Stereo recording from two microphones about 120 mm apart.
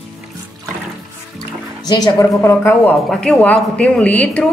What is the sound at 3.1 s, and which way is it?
Speech, 10° left (ahead or behind).